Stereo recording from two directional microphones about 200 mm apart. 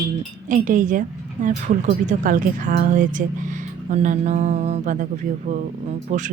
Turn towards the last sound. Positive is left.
turn(degrees=-40)  # may be behind; listen again after turning